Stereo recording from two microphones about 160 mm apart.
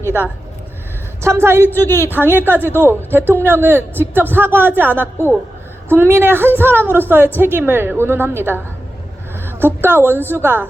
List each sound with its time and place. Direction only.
1.2 s a man's voice: 15° right (ahead or behind)
1.6 s a woman's voice: 15° left (ahead or behind)
2.4 s a man's voice: 15° right (ahead or behind)